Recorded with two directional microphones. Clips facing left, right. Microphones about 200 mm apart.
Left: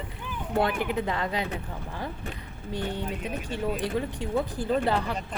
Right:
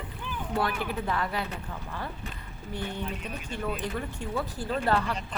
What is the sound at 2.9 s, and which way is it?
Speech, 15° left (ahead or behind).